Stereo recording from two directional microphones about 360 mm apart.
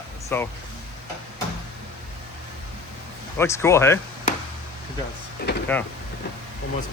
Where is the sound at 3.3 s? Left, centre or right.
Centre.